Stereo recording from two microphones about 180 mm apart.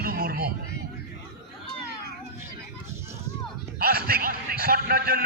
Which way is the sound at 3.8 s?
55° right (ahead or behind).